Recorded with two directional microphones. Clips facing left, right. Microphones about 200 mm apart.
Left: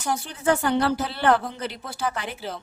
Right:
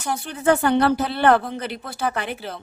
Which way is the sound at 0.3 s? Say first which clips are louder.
Right 5 dB; 60° right (ahead or behind).